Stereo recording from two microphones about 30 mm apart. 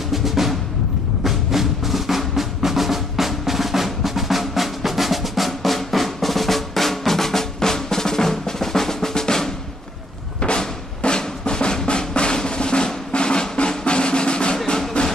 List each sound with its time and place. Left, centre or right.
0.1 s music: centre
1.2 s drum: centre
11.0 s drum: left
15.0 s music: left